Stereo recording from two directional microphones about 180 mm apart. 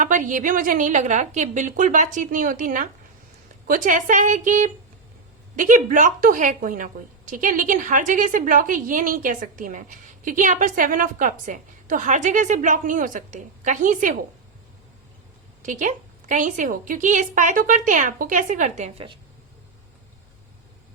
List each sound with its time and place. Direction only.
0.0 s a woman's voice: 45° right (ahead or behind)
15.6 s a woman's voice: 45° right (ahead or behind)